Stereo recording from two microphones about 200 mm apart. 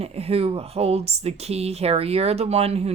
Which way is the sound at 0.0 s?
30° right (ahead or behind).